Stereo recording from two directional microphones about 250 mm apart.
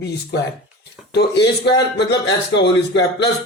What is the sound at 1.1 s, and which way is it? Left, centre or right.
A man's voice, left.